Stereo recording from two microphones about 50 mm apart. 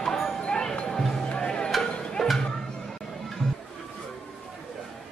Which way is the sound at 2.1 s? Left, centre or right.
Centre.